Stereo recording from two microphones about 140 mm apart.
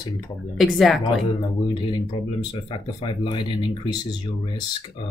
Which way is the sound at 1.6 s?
30° left (ahead or behind).